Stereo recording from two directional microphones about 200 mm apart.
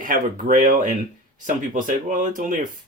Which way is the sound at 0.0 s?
45° right (ahead or behind).